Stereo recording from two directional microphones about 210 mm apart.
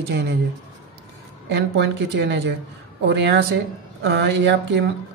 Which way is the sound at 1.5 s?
55° right (ahead or behind).